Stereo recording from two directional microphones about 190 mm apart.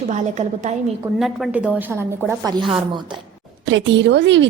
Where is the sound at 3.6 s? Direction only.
70° right (ahead or behind).